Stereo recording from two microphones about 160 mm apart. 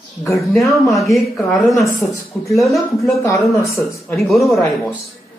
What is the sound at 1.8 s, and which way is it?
Speech, 20° left (ahead or behind).